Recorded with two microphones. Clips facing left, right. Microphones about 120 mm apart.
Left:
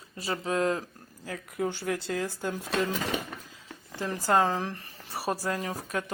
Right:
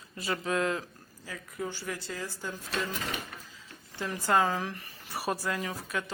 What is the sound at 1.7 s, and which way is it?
Speech, 60° left (ahead or behind).